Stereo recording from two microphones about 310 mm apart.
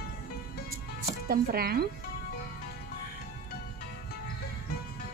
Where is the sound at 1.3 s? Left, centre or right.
Right.